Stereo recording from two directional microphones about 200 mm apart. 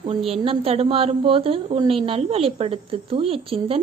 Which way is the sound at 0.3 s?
30° right (ahead or behind).